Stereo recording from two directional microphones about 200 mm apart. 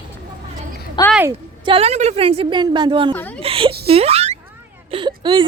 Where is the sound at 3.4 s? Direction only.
25° right (ahead or behind).